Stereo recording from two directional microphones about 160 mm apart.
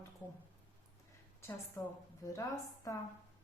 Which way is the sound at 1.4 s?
15° left (ahead or behind).